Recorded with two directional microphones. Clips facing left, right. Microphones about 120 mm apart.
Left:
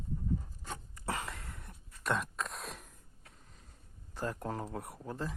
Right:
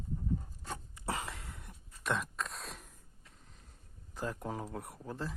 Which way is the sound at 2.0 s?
Centre (ahead or behind).